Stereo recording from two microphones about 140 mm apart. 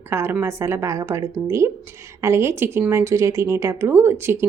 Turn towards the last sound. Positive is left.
turn(degrees=-15)  # may be behind; listen again after turning